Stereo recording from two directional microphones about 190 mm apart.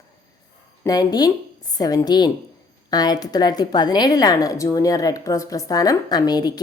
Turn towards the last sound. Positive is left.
turn(degrees=20)  # may be behind; listen again after turning